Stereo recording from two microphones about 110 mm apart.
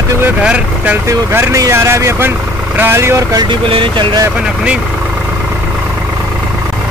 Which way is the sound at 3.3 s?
50° right (ahead or behind).